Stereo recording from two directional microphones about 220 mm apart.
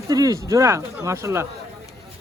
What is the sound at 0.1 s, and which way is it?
Speech, 15° right (ahead or behind).